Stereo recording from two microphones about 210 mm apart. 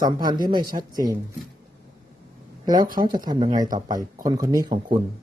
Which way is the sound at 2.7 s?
40° right (ahead or behind).